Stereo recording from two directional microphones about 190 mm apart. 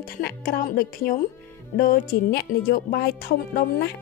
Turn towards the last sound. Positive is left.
turn(degrees=60)  # may be behind; listen again after turning